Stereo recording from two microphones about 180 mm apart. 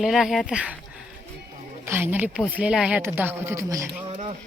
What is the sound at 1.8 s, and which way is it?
Speech, 10° right (ahead or behind).